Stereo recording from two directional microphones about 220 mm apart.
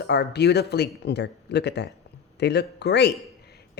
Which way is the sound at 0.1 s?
50° left (ahead or behind).